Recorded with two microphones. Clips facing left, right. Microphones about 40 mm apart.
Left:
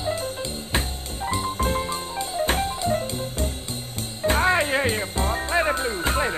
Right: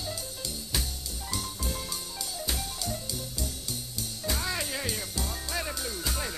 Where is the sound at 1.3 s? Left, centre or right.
Left.